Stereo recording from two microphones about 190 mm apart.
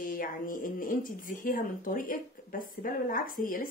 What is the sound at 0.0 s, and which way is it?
Speech, 45° left (ahead or behind).